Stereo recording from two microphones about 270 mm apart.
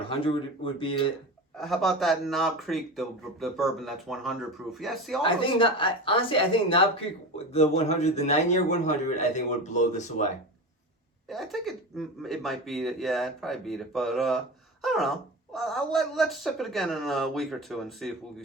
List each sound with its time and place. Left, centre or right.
0.1 s a woman's voice: centre
1.5 s speech: centre
5.2 s a woman's voice: centre
11.3 s speech: centre